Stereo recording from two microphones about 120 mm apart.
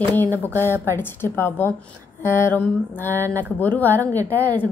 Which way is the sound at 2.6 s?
15° left (ahead or behind).